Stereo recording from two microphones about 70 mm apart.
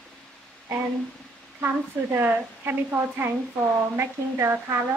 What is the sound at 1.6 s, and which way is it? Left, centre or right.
A woman's voice, right.